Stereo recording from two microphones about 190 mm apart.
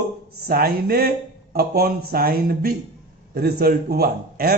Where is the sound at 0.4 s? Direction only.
55° right (ahead or behind).